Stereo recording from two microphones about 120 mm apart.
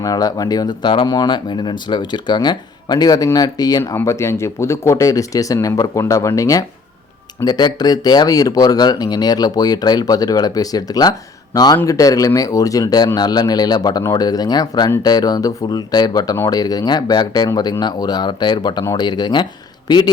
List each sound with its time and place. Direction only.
0.0 s speech: 30° left (ahead or behind)